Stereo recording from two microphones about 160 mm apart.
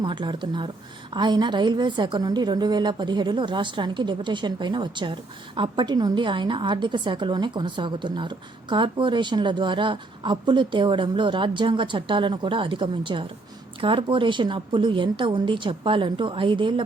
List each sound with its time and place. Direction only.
0.0 s a woman's voice: 30° right (ahead or behind)